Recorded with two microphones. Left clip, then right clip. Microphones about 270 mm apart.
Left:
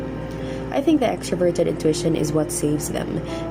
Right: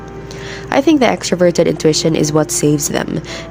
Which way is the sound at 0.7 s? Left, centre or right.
Right.